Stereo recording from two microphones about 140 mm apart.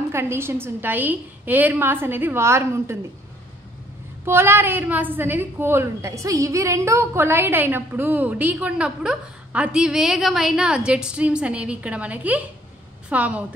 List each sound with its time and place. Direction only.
0.1 s a woman's voice: 20° right (ahead or behind)
4.2 s a woman's voice: 15° right (ahead or behind)